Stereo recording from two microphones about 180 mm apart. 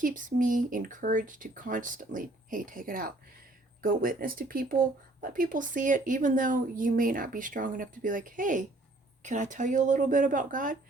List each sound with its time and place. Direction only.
0.0 s speech: 50° right (ahead or behind)